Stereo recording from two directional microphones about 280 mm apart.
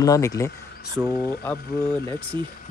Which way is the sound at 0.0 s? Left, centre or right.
Centre.